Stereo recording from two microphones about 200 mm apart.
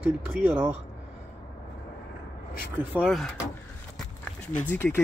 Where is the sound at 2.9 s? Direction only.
Centre (ahead or behind).